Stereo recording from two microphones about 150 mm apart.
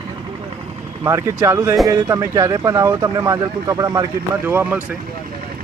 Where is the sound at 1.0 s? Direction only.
20° right (ahead or behind).